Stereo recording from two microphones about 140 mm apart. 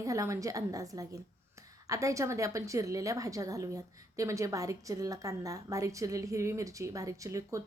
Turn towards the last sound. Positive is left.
turn(degrees=-20)  # may be behind; listen again after turning